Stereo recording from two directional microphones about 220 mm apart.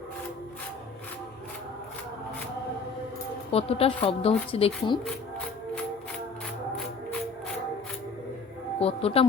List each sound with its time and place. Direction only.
3.5 s speech: 25° left (ahead or behind)
8.8 s speech: 25° left (ahead or behind)